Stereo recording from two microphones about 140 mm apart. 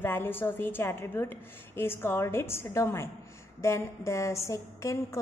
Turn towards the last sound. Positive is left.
turn(degrees=20)  # may be behind; listen again after turning